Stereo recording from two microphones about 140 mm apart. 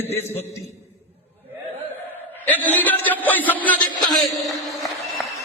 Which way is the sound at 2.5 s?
10° left (ahead or behind).